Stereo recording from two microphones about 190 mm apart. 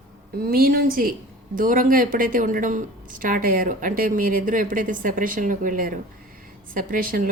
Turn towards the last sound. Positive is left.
turn(degrees=-45)  # may be behind; listen again after turning